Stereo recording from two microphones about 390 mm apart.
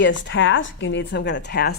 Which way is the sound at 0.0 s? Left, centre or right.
Left.